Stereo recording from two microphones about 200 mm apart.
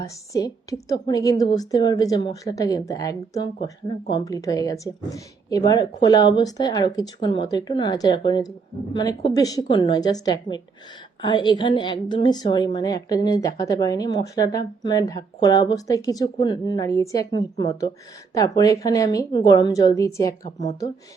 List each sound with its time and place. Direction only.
0.3 s a woman's voice: 15° left (ahead or behind)